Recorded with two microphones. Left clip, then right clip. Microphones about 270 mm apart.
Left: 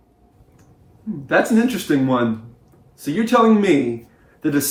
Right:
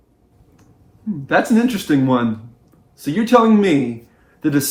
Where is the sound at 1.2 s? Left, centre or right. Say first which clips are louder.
Right 1 dB; right.